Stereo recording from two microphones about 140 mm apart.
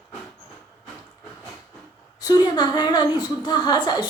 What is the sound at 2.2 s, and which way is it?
A woman's voice, 30° left (ahead or behind).